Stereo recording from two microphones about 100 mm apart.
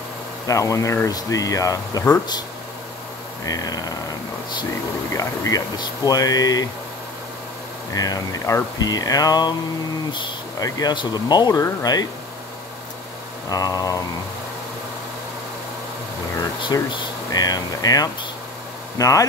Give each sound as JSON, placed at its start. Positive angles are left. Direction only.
{"t": 0.5, "sound": "speech", "side_deg": 35}
{"t": 3.4, "sound": "speech", "side_deg": 40}
{"t": 5.1, "sound": "speech", "side_deg": 35}
{"t": 7.9, "sound": "speech", "side_deg": 40}
{"t": 10.6, "sound": "speech", "side_deg": 45}
{"t": 13.5, "sound": "speech", "side_deg": 40}
{"t": 16.9, "sound": "speech", "side_deg": 40}